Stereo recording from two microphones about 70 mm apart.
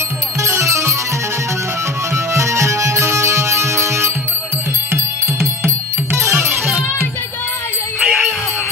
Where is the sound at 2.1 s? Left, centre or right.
Right.